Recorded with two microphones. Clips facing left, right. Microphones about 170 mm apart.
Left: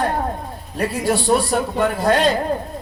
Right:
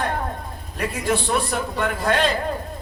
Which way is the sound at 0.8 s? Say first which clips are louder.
Left 3 dB; 35° left (ahead or behind).